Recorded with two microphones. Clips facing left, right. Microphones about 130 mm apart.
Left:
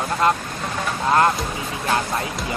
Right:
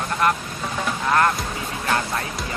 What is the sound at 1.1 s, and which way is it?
Speech, 25° left (ahead or behind).